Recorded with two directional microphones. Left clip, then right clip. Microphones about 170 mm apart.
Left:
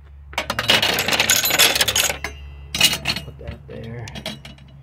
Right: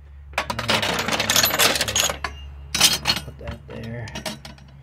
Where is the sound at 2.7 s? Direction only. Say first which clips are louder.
Even; 40° right (ahead or behind).